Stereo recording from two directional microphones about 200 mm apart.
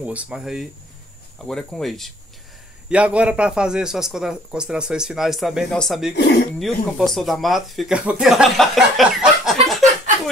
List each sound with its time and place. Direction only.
0.0 s speech: 5° right (ahead or behind)
6.1 s speech: 60° left (ahead or behind)
6.6 s speech: centre (ahead or behind)